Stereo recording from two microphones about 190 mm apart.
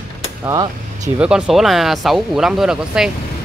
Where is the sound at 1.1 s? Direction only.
5° right (ahead or behind).